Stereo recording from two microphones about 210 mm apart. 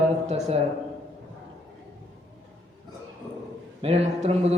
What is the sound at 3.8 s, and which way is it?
Speech, 30° right (ahead or behind).